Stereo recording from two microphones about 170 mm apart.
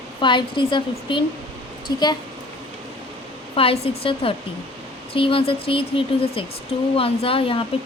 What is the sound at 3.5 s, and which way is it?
A woman's voice, 35° left (ahead or behind).